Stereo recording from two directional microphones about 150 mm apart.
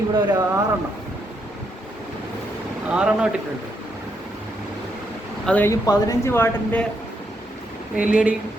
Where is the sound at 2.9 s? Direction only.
5° right (ahead or behind).